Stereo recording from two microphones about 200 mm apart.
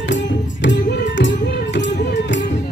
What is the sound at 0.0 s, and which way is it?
Music, 65° left (ahead or behind).